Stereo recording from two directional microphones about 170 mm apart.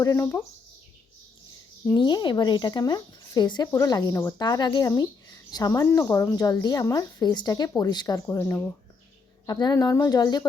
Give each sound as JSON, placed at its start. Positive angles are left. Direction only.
{"t": 0.0, "sound": "speech", "side_deg": 15}
{"t": 2.0, "sound": "speech", "side_deg": 30}